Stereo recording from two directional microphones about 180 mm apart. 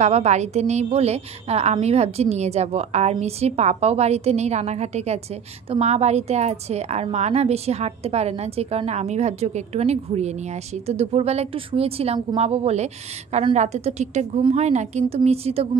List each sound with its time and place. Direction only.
0.0 s a woman's voice: 40° right (ahead or behind)